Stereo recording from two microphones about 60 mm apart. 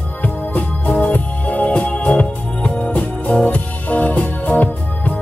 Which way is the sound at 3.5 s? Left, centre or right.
Left.